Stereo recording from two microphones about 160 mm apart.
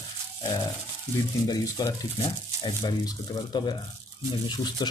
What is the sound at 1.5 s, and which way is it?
Speech, 20° left (ahead or behind).